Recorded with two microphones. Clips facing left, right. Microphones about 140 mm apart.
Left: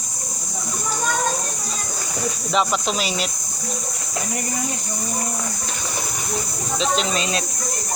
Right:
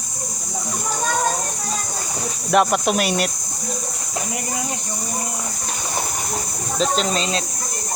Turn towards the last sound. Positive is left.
turn(degrees=-40)  # may be behind; listen again after turning